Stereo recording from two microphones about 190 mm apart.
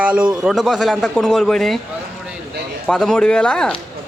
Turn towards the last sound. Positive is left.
turn(degrees=5)  # may be behind; listen again after turning